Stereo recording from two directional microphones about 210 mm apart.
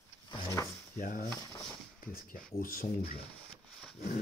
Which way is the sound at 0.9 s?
40° left (ahead or behind).